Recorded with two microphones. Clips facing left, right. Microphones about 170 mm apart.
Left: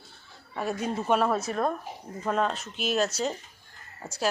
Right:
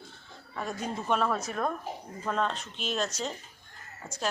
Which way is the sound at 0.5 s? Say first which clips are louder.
Left 5 dB; 10° left (ahead or behind).